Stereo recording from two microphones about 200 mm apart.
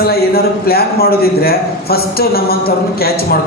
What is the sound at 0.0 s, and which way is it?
A man's voice, 50° left (ahead or behind).